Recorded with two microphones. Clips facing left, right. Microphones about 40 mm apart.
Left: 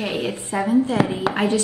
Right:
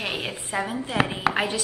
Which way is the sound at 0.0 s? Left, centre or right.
Right.